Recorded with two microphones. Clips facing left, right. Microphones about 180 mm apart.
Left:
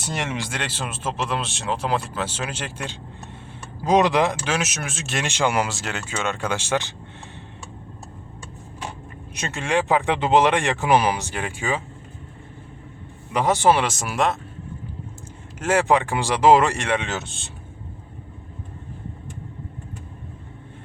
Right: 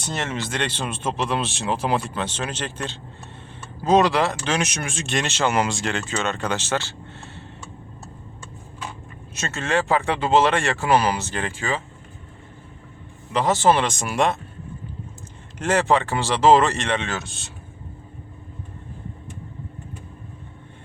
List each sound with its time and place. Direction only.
0.0 s speech: 10° left (ahead or behind)
9.3 s speech: 15° left (ahead or behind)
13.3 s speech: 15° left (ahead or behind)
15.5 s speech: 10° left (ahead or behind); by 17.5 s 25° left (ahead or behind)